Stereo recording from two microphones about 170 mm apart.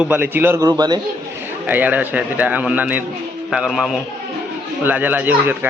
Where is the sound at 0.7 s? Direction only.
25° right (ahead or behind).